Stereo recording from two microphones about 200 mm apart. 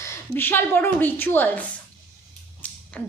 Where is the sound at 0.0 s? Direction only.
10° left (ahead or behind).